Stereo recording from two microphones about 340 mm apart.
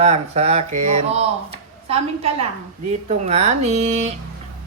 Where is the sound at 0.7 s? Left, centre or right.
Right.